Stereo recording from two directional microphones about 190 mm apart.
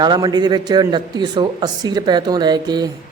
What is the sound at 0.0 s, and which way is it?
Speech, 20° right (ahead or behind).